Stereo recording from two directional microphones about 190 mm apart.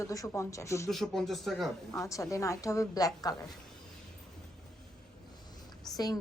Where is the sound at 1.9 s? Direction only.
15° left (ahead or behind).